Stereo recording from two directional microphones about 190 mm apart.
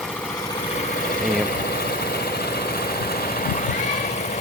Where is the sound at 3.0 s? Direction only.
50° left (ahead or behind).